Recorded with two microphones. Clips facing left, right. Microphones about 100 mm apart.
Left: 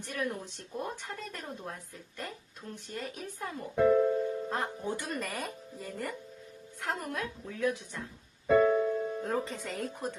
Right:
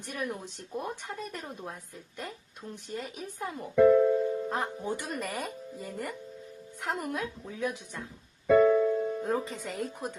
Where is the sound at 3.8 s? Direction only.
45° right (ahead or behind).